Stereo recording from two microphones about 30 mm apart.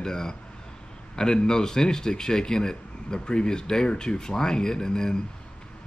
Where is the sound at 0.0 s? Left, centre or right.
Left.